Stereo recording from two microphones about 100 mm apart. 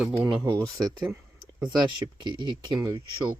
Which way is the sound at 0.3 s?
55° right (ahead or behind).